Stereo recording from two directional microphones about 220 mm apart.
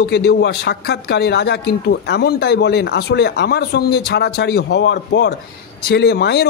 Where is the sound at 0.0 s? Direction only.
45° left (ahead or behind).